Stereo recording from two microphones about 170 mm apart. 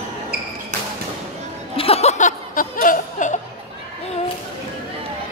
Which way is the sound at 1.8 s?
35° left (ahead or behind).